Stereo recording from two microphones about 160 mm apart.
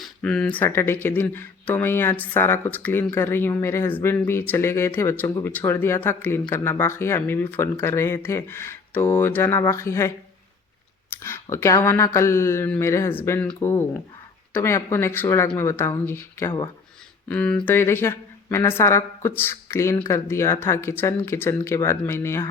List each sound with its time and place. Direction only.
0.0 s speech: 5° left (ahead or behind)
11.1 s speech: 15° left (ahead or behind)